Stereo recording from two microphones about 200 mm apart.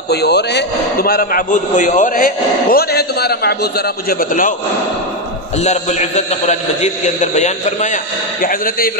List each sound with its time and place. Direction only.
0.1 s a man's voice: 55° left (ahead or behind)
5.6 s a man's voice: 35° left (ahead or behind)